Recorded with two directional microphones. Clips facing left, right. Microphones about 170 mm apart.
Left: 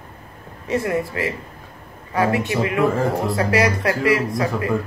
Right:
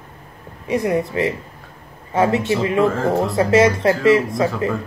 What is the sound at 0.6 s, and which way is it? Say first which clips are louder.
Speech: right 2 dB; 15° right (ahead or behind).